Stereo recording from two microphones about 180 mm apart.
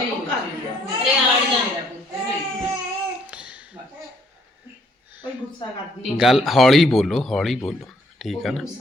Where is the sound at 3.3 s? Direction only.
5° right (ahead or behind).